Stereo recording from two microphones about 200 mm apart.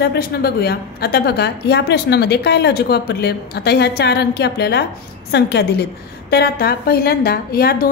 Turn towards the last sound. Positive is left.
turn(degrees=50)  # may be behind; listen again after turning